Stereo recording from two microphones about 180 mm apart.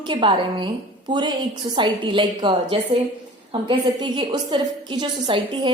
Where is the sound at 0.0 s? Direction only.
25° right (ahead or behind).